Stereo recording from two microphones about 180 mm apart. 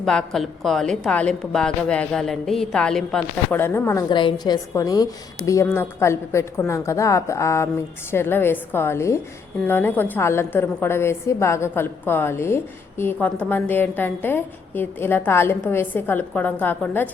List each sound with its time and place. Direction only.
0.0 s a woman's voice: 5° left (ahead or behind)
4.1 s a woman's voice: 25° left (ahead or behind); by 17.1 s 10° left (ahead or behind)